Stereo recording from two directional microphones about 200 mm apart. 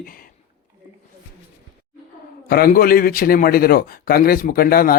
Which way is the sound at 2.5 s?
45° left (ahead or behind).